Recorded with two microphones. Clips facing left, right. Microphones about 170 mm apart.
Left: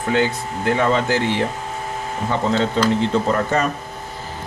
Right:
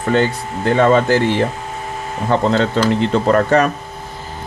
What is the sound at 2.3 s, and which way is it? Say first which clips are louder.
Speech: right 5 dB; 65° right (ahead or behind).